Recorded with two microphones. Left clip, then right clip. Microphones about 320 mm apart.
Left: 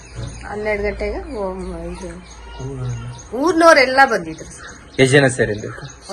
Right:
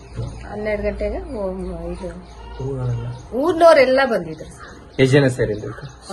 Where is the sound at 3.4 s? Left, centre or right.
Centre.